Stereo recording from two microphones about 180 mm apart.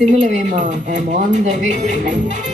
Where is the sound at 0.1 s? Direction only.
45° right (ahead or behind).